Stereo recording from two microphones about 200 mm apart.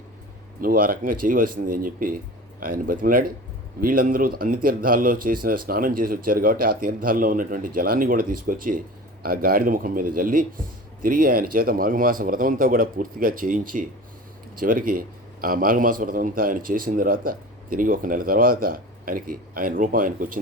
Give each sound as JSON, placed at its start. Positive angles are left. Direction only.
{"t": 0.6, "sound": "a man's voice", "side_deg": -45}